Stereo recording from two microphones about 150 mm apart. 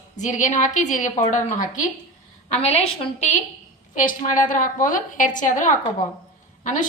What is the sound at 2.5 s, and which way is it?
Speech, 45° left (ahead or behind).